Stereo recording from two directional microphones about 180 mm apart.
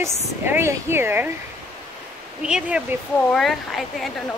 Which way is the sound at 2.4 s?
5° right (ahead or behind).